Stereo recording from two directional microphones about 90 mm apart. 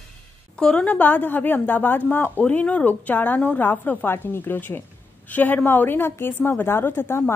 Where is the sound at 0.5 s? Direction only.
10° left (ahead or behind).